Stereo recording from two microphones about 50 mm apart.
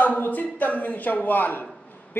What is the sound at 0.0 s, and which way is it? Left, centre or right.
A man's voice, left.